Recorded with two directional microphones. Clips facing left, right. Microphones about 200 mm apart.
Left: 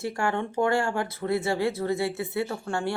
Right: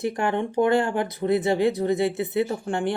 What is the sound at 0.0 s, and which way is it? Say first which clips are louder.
Speech: right 3 dB; 20° right (ahead or behind).